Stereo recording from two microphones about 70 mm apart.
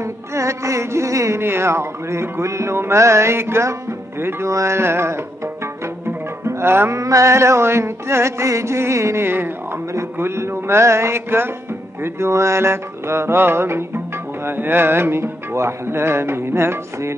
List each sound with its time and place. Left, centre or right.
0.0 s music: right